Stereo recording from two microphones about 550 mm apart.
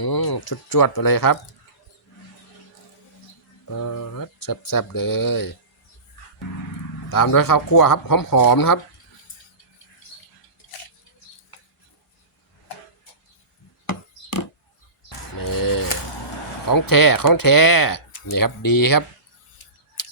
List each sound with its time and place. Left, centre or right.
0.0 s speech: left
3.7 s speech: left
7.1 s speech: left
15.4 s a sound: left
16.6 s speech: left